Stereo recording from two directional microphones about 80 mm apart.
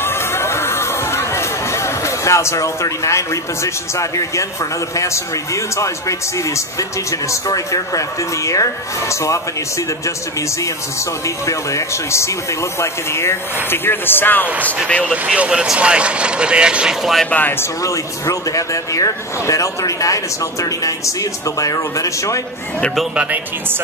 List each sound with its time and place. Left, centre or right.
0.0 s speech: left
11.2 s speech: left
15.0 s speech: centre
17.3 s speech: left
17.8 s speech: left